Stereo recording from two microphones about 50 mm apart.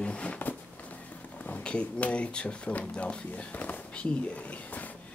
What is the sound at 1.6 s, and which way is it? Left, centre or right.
Speech, left.